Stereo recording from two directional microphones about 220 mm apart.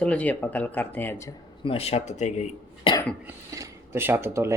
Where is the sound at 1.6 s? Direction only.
25° left (ahead or behind).